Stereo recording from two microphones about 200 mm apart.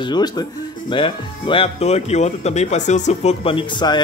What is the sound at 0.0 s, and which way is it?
Speech, 20° left (ahead or behind).